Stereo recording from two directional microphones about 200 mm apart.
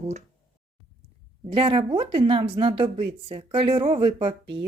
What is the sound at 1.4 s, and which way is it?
Speech, 25° right (ahead or behind).